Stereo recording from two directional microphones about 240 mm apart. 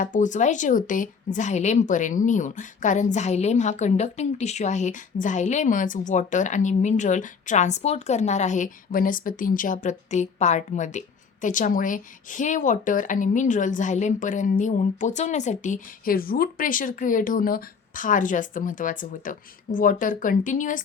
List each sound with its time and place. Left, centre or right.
0.0 s a woman's voice: left